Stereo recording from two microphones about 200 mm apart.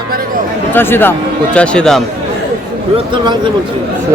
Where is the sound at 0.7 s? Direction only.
10° left (ahead or behind).